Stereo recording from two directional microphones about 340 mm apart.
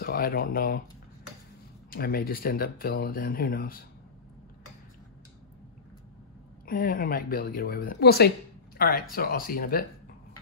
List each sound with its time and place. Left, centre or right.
0.0 s speech: left
1.9 s speech: left
6.6 s speech: left